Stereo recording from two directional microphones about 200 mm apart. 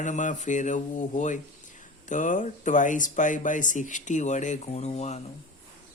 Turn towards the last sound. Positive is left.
turn(degrees=35)  # may be behind; listen again after turning